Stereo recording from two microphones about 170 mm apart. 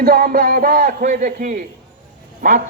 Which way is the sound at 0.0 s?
60° right (ahead or behind).